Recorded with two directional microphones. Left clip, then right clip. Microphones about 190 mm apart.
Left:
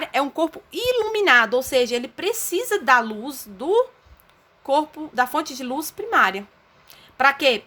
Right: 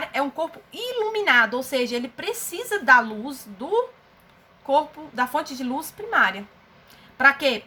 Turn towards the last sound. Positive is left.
turn(degrees=60)  # may be behind; listen again after turning